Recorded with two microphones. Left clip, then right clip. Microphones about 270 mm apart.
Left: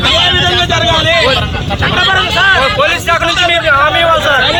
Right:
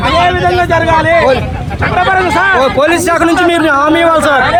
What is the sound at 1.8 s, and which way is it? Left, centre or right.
A man's voice, right.